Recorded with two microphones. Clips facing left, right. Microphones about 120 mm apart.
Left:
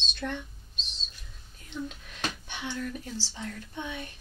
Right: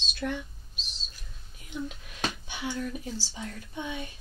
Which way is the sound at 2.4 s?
5° right (ahead or behind).